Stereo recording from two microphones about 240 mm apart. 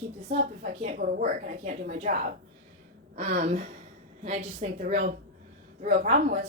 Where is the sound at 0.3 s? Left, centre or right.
Right.